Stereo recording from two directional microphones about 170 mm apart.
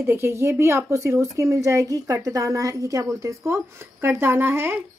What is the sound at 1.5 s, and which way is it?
A woman's voice, 20° right (ahead or behind).